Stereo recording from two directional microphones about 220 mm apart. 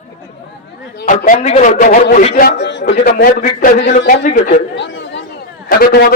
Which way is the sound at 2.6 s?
50° left (ahead or behind).